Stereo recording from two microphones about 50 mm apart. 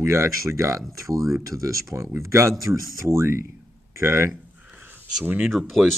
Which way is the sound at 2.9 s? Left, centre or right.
Right.